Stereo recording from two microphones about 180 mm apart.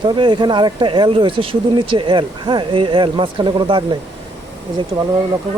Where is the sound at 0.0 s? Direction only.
25° right (ahead or behind).